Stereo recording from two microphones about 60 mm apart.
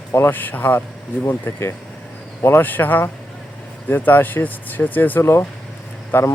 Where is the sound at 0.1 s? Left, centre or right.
Left.